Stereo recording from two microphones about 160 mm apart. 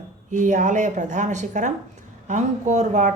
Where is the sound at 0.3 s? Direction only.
50° right (ahead or behind).